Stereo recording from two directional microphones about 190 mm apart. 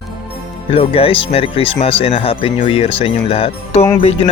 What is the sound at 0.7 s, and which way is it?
Speech, 30° left (ahead or behind).